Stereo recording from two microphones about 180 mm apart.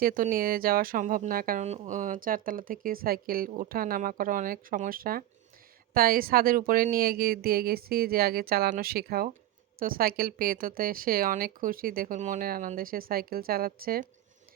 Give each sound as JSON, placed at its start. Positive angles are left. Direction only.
{"t": 0.0, "sound": "speech", "side_deg": -55}
{"t": 1.6, "sound": "speech", "side_deg": -40}